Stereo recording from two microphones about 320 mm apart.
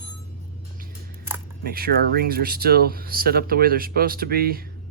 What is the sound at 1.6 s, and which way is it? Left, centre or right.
Speech, right.